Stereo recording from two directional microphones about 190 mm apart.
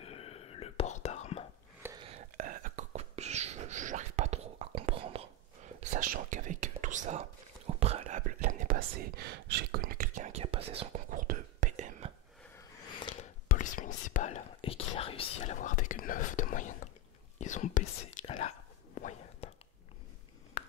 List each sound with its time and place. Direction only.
0.0 s whispering: 30° left (ahead or behind)
2.0 s whispering: 30° right (ahead or behind)
2.3 s whispering: 45° right (ahead or behind); by 5.2 s 30° right (ahead or behind)
5.8 s whispering: 45° right (ahead or behind)
11.1 s whispering: 45° right (ahead or behind)
13.2 s whispering: 45° left (ahead or behind)